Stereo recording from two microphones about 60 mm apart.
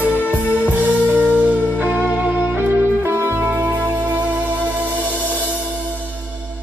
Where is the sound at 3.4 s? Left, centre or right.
Right.